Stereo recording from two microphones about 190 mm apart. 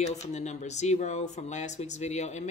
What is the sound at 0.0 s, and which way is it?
Speech, 35° left (ahead or behind).